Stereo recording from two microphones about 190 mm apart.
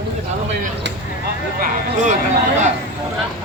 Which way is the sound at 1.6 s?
40° right (ahead or behind).